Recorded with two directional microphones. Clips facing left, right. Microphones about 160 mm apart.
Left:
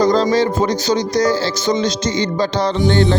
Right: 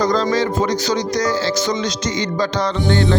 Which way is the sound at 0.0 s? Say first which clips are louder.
Left 3 dB; 30° left (ahead or behind).